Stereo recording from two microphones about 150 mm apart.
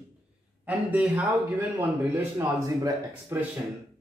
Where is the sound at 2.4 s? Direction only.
15° right (ahead or behind).